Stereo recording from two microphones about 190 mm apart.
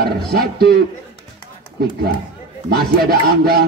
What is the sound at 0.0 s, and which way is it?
Speech, 55° right (ahead or behind).